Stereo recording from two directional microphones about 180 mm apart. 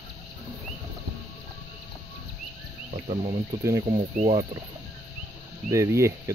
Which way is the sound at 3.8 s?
35° right (ahead or behind).